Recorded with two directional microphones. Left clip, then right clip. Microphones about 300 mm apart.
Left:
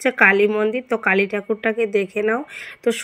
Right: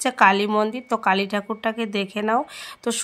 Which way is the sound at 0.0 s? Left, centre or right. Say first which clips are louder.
Left 3 dB; right.